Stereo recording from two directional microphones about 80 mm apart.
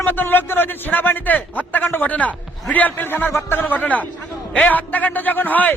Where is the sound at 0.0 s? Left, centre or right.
Left.